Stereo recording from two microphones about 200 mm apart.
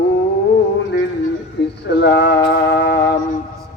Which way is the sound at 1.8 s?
60° left (ahead or behind).